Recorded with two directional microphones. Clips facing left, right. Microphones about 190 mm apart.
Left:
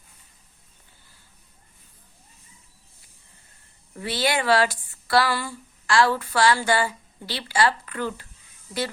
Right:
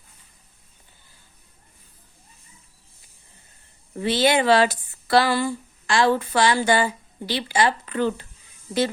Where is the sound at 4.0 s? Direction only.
25° right (ahead or behind).